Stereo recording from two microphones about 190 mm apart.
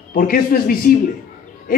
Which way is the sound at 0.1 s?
50° left (ahead or behind).